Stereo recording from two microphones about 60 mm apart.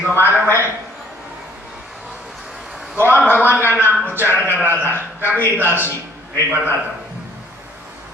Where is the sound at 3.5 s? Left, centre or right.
Left.